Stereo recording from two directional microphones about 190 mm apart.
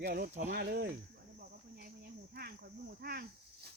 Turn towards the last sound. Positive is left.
turn(degrees=-55)  # may be behind; listen again after turning